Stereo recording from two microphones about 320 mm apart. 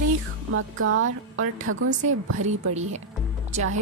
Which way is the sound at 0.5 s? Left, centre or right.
Right.